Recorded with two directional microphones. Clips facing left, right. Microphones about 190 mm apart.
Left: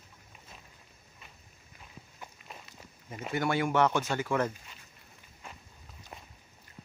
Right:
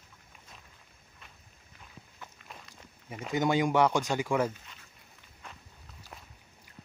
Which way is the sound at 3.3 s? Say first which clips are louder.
Right 2 dB; 15° right (ahead or behind).